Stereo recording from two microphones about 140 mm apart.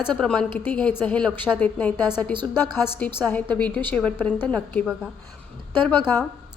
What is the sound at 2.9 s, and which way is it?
A woman's voice, 10° left (ahead or behind).